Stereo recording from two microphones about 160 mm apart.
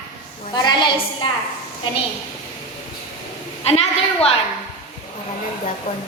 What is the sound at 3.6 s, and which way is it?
Speech, 40° left (ahead or behind).